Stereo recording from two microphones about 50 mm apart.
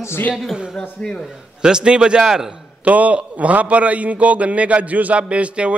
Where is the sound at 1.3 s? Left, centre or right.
Centre.